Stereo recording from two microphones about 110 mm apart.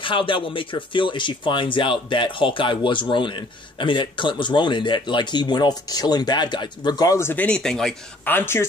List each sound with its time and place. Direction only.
0.0 s speech: 50° left (ahead or behind)
7.2 s speech: 20° left (ahead or behind)
7.4 s speech: 5° left (ahead or behind)
8.3 s speech: 20° left (ahead or behind)